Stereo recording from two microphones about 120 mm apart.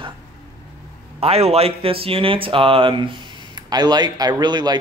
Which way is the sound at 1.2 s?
55° right (ahead or behind).